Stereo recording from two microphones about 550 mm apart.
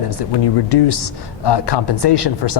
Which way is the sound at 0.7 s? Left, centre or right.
Left.